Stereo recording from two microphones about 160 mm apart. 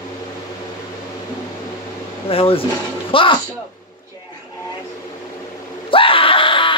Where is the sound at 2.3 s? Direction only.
35° left (ahead or behind).